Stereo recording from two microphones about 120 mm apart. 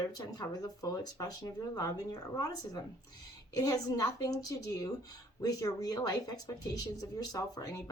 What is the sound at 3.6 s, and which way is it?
Speech, 30° left (ahead or behind).